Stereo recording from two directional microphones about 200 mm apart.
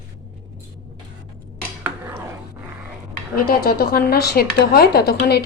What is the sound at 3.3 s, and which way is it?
A woman's voice, 50° left (ahead or behind).